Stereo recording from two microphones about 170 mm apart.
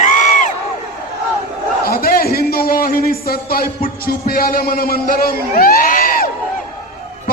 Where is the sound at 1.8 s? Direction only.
60° left (ahead or behind).